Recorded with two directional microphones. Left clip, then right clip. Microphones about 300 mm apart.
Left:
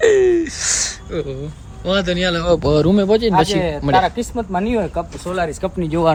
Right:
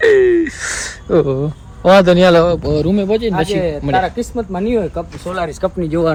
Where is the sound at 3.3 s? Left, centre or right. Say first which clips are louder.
Left 1 dB; left.